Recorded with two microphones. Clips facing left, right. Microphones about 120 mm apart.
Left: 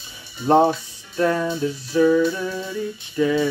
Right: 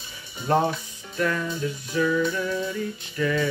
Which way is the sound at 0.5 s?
30° left (ahead or behind).